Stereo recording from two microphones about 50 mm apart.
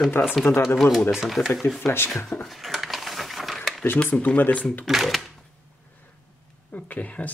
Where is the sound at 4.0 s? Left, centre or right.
Left.